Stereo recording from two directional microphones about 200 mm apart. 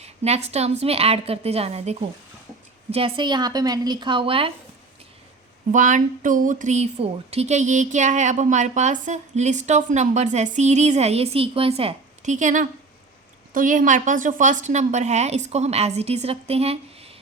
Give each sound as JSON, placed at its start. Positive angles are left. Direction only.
{"t": 0.0, "sound": "speech", "side_deg": -30}
{"t": 5.7, "sound": "speech", "side_deg": -40}